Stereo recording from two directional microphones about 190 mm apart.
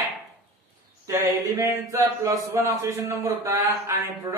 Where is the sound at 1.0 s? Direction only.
15° right (ahead or behind).